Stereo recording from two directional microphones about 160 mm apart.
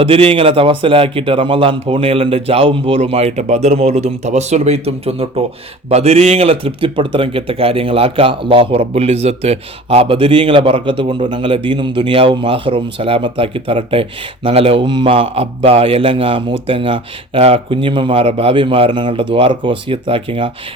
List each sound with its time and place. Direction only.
0.0 s speech: 35° right (ahead or behind)